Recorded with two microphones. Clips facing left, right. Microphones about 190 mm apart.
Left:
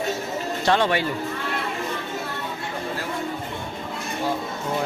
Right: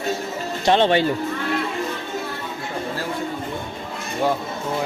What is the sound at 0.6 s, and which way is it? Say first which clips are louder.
Speech: right 4 dB; 25° right (ahead or behind).